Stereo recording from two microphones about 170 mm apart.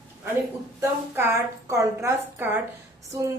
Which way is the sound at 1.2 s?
15° right (ahead or behind).